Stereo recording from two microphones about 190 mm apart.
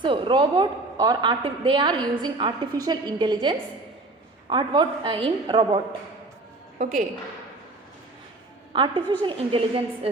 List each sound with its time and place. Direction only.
0.0 s a woman's voice: 25° right (ahead or behind)
8.7 s a woman's voice: 25° right (ahead or behind)